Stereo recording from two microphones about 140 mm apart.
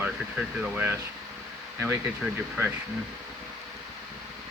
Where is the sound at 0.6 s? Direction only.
10° right (ahead or behind).